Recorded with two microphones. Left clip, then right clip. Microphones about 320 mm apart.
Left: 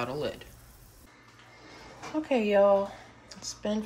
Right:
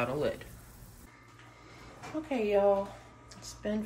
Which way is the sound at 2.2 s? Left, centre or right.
Left.